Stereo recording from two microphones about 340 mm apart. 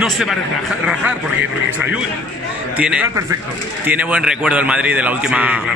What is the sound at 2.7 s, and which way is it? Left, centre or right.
A man's voice, centre.